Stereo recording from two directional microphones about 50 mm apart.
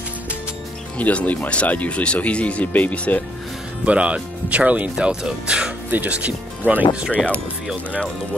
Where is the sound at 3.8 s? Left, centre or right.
Right.